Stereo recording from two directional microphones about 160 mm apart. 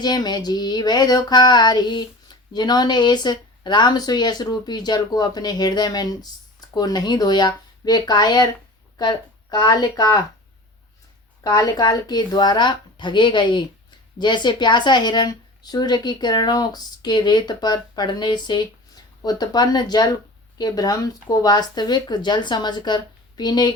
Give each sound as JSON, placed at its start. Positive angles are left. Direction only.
{"t": 0.0, "sound": "a woman's voice", "side_deg": 25}
{"t": 11.4, "sound": "a woman's voice", "side_deg": 25}